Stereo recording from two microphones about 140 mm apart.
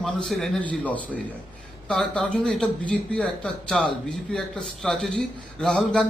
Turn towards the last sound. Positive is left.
turn(degrees=5)  # may be behind; listen again after turning